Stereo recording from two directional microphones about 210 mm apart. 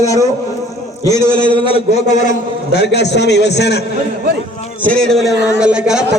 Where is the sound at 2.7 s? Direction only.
55° left (ahead or behind).